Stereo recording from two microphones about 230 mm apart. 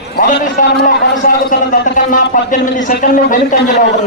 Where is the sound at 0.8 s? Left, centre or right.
Left.